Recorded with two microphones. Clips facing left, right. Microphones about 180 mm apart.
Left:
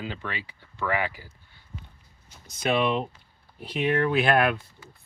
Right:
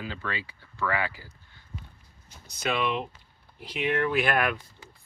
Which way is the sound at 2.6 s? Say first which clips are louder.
Left 4 dB; 30° left (ahead or behind).